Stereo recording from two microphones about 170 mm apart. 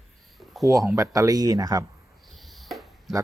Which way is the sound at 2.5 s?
Centre (ahead or behind).